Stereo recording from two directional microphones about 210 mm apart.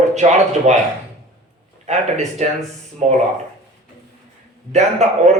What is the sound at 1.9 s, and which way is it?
A man's voice, 35° right (ahead or behind).